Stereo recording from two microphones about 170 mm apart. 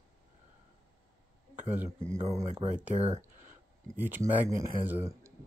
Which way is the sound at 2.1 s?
15° right (ahead or behind).